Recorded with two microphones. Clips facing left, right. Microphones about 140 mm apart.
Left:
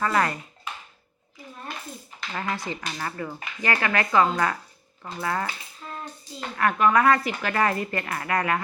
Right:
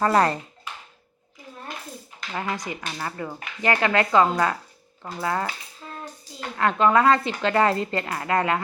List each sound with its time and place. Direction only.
0.0 s speech: 35° right (ahead or behind)
2.3 s speech: 15° right (ahead or behind)
6.6 s speech: 25° right (ahead or behind)